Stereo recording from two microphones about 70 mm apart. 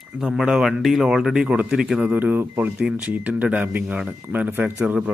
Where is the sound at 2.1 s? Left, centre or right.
Right.